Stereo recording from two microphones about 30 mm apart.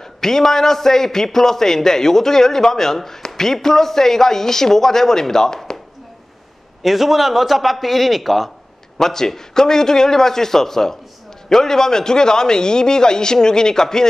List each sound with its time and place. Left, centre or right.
0.2 s a man's voice: centre
6.8 s a man's voice: centre
8.9 s a man's voice: centre